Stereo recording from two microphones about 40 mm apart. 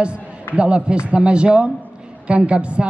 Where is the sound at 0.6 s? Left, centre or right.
Right.